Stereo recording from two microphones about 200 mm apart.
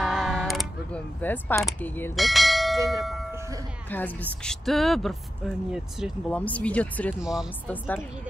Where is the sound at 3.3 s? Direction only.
15° right (ahead or behind).